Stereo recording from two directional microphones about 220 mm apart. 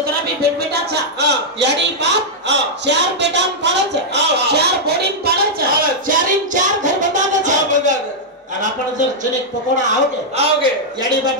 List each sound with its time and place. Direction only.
0.0 s a sound: 45° right (ahead or behind)
9.8 s a man's voice: 35° right (ahead or behind)
10.6 s a man's voice: 20° right (ahead or behind)